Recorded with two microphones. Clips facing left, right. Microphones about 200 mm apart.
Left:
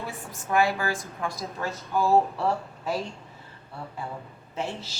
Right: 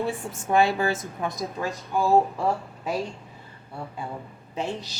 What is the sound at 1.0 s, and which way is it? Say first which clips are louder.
Speech: right 3 dB; 15° right (ahead or behind).